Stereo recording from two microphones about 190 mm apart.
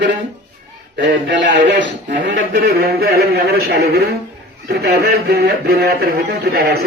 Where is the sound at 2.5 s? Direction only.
55° right (ahead or behind).